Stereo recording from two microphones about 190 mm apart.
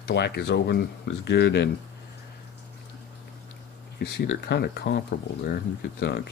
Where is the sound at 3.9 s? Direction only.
60° left (ahead or behind).